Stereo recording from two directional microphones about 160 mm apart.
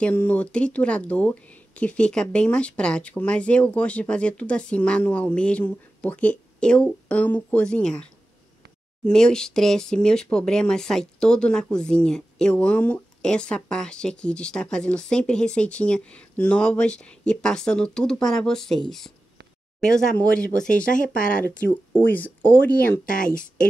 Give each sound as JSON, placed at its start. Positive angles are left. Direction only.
{"t": 0.0, "sound": "speech", "side_deg": 10}
{"t": 23.0, "sound": "a woman's voice", "side_deg": 55}